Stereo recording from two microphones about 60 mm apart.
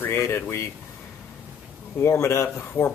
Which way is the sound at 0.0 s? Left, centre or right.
Left.